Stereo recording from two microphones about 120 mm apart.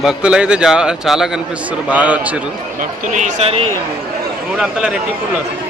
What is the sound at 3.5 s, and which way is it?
Speech, 55° right (ahead or behind).